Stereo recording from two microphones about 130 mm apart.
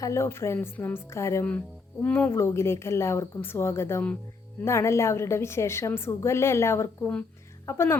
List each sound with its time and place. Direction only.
0.0 s speech: 20° left (ahead or behind)